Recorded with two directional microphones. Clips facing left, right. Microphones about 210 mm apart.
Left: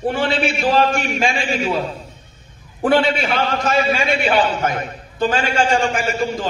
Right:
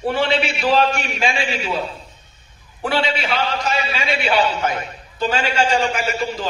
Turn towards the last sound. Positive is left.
turn(degrees=50)  # may be behind; listen again after turning